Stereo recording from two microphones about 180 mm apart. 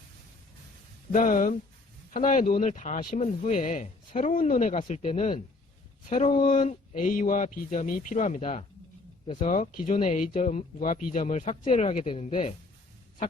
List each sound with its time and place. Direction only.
1.1 s speech: 50° left (ahead or behind); by 9.5 s 30° left (ahead or behind)
9.5 s speech: 45° left (ahead or behind)